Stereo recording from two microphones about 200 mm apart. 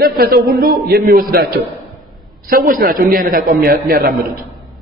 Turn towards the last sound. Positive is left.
turn(degrees=-50)  # may be behind; listen again after turning